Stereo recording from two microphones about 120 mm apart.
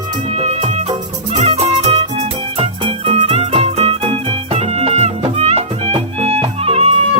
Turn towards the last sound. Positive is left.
turn(degrees=-55)  # may be behind; listen again after turning